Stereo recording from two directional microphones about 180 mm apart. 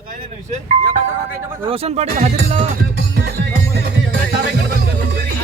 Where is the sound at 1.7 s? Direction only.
35° right (ahead or behind).